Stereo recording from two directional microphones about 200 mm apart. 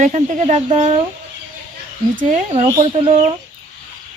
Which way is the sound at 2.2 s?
30° right (ahead or behind).